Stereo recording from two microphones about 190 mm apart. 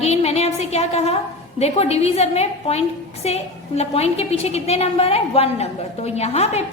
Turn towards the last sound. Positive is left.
turn(degrees=35)  # may be behind; listen again after turning